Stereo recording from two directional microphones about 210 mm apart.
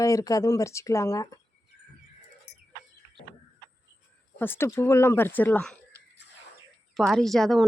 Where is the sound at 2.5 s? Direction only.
55° left (ahead or behind).